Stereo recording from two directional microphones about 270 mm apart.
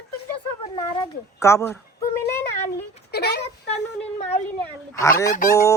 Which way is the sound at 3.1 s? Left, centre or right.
Left.